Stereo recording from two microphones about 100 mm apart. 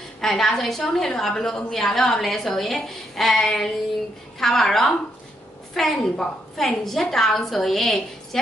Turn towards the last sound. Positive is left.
turn(degrees=5)  # may be behind; listen again after turning